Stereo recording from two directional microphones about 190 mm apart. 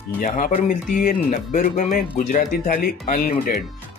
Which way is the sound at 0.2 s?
40° left (ahead or behind).